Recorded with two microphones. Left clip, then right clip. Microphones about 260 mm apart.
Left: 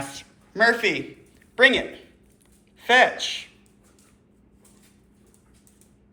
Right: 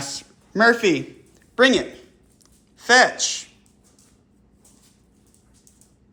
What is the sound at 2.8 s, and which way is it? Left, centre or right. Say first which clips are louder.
Speech: right 2 dB; right.